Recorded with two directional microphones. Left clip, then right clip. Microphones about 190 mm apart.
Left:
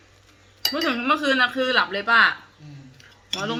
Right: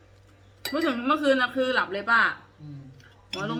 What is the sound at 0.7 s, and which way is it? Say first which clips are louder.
Speech: left 2 dB; 20° left (ahead or behind).